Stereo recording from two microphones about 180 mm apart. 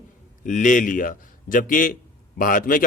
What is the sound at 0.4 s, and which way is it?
A man's voice, 45° left (ahead or behind).